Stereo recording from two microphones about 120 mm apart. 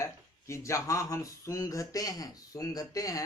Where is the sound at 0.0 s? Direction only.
25° left (ahead or behind).